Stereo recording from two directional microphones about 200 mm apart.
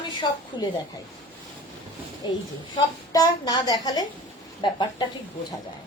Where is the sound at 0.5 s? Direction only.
20° left (ahead or behind).